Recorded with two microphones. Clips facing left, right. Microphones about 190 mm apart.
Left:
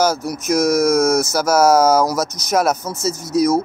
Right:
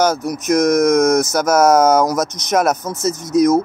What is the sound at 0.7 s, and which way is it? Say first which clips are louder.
Speech: right 2 dB; centre (ahead or behind).